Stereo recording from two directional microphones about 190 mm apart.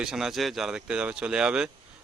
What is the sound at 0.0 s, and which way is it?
A man's voice, centre (ahead or behind).